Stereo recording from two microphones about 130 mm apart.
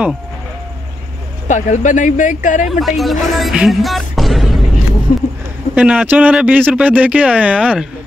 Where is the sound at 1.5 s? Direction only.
75° left (ahead or behind).